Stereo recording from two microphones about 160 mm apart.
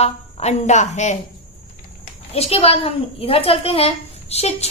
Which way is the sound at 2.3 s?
40° left (ahead or behind).